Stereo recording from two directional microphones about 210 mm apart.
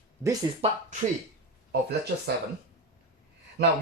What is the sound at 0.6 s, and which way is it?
Speech, 30° right (ahead or behind).